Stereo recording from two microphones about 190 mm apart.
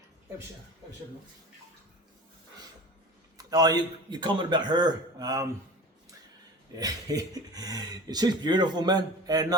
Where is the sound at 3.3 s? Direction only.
20° right (ahead or behind).